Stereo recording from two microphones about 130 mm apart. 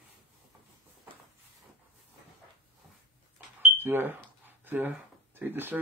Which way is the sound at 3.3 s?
15° right (ahead or behind).